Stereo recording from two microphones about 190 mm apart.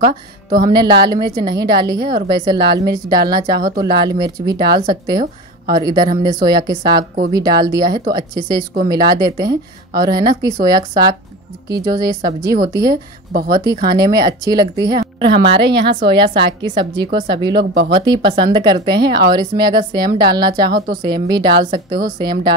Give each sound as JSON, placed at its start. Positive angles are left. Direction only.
{"t": 0.0, "sound": "speech", "side_deg": -25}